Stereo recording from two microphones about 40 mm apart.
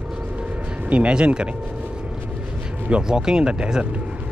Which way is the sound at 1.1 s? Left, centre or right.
Right.